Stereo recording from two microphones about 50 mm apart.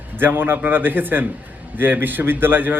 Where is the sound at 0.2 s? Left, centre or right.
Right.